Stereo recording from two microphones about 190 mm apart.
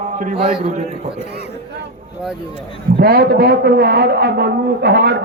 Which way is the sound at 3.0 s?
55° right (ahead or behind).